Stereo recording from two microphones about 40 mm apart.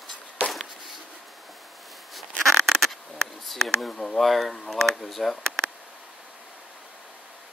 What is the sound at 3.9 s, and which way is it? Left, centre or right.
Speech, centre.